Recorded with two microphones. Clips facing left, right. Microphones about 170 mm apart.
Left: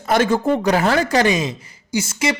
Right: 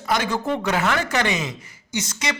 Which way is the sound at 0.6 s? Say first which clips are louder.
Left 5 dB; 35° left (ahead or behind).